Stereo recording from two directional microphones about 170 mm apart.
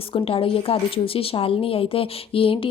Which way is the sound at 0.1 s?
35° left (ahead or behind).